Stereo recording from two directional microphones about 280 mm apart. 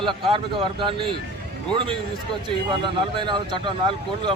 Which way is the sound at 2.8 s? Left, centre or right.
Centre.